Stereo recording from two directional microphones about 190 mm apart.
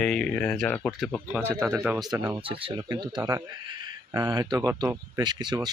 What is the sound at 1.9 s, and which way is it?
Speech, 20° right (ahead or behind).